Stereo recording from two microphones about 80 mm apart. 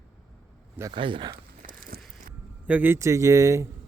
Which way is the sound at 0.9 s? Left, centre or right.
Right.